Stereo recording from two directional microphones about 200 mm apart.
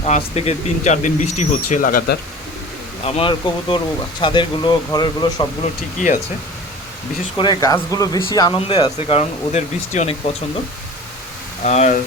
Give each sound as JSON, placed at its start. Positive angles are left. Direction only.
{"t": 0.0, "sound": "speech", "side_deg": 30}
{"t": 3.0, "sound": "speech", "side_deg": 30}
{"t": 7.3, "sound": "speech", "side_deg": 20}
{"t": 11.6, "sound": "speech", "side_deg": 35}